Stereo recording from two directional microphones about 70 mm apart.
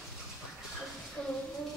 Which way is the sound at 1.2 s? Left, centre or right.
Centre.